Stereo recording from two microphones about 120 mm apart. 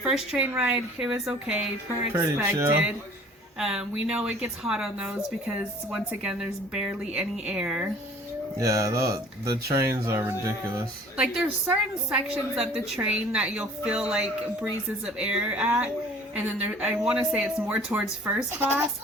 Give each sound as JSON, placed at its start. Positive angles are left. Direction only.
{"t": 0.0, "sound": "a woman's voice", "side_deg": -5}
{"t": 2.1, "sound": "speech", "side_deg": -20}
{"t": 3.6, "sound": "a woman's voice", "side_deg": -5}
{"t": 8.5, "sound": "speech", "side_deg": -25}
{"t": 11.6, "sound": "a woman's voice", "side_deg": -10}